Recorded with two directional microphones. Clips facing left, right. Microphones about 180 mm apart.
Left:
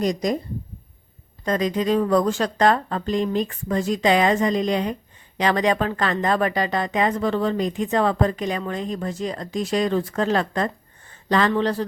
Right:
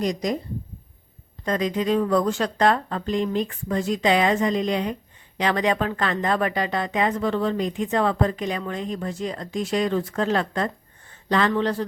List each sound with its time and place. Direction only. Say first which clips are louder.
0.0 s speech: left 2 dB; 45° left (ahead or behind)
1.5 s speech: left 2 dB; 40° left (ahead or behind)